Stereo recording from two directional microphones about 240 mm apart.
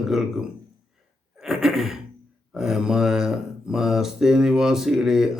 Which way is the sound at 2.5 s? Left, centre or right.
Centre.